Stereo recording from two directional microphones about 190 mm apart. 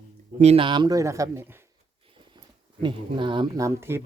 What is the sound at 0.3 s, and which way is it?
Speech, 35° right (ahead or behind).